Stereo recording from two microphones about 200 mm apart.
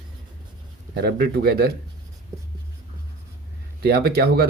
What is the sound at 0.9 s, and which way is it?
Speech, 50° right (ahead or behind).